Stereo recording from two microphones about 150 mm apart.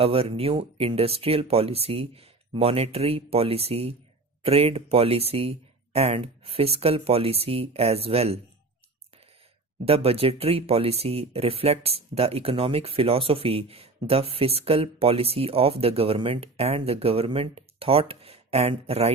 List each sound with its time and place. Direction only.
0.0 s speech: 40° right (ahead or behind)
9.8 s speech: 40° right (ahead or behind)